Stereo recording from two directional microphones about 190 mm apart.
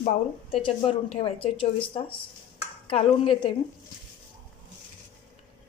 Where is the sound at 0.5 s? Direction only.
30° left (ahead or behind).